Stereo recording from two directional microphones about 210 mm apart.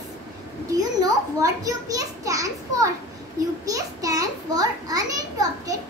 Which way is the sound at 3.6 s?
15° right (ahead or behind).